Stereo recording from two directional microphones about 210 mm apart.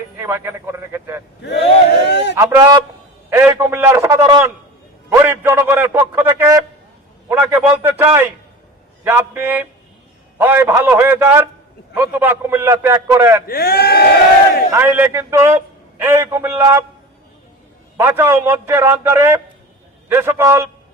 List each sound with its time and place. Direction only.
0.2 s a man's voice: 10° right (ahead or behind)
1.4 s speech: 55° left (ahead or behind)
2.3 s a man's voice: 15° right (ahead or behind)
13.5 s speech: 45° left (ahead or behind)
14.7 s a man's voice: 10° right (ahead or behind)
17.9 s a man's voice: 10° right (ahead or behind)